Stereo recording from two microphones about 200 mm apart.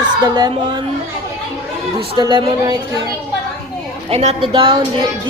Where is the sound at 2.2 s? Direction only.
20° right (ahead or behind).